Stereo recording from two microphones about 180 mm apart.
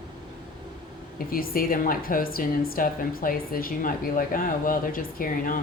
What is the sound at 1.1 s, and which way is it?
A woman's voice, 55° left (ahead or behind).